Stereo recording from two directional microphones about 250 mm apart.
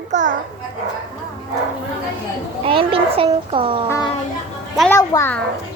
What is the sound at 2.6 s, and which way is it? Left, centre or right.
A child's voice, right.